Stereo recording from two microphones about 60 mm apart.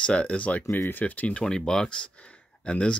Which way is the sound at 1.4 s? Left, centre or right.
Centre.